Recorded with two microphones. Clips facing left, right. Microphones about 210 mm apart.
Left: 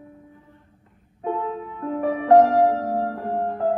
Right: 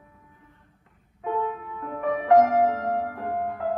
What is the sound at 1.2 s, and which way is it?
Music, 35° left (ahead or behind).